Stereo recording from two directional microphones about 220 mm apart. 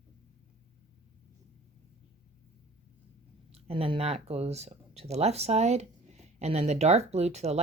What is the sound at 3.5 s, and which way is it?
Speech, 25° right (ahead or behind).